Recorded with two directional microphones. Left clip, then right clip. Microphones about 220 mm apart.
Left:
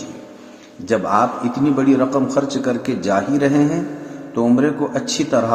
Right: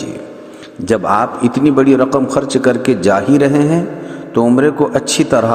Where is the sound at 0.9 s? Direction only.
40° right (ahead or behind).